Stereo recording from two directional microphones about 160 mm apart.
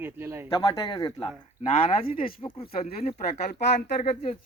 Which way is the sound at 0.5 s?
25° left (ahead or behind).